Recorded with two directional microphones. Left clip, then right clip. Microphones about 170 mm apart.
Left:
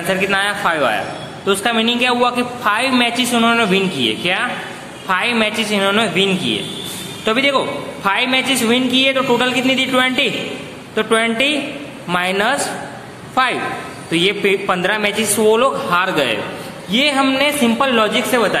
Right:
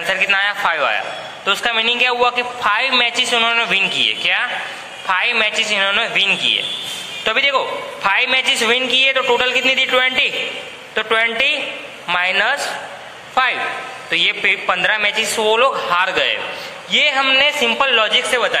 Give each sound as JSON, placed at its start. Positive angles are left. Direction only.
{"t": 0.1, "sound": "a man's voice", "side_deg": -10}